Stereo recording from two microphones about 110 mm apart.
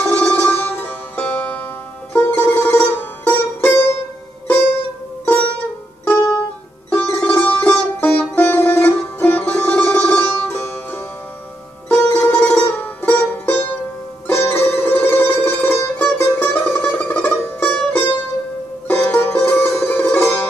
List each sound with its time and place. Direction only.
0.0 s music: 15° left (ahead or behind)
6.0 s music: 25° left (ahead or behind)
7.1 s music: 10° left (ahead or behind)